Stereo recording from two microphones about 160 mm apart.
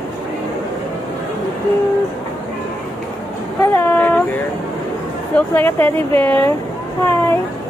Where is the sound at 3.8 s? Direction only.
10° left (ahead or behind).